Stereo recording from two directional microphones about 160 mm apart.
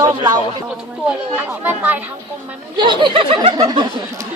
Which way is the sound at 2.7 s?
30° right (ahead or behind).